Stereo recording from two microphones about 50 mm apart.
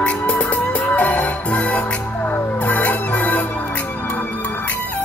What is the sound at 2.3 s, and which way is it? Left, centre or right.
Music, left.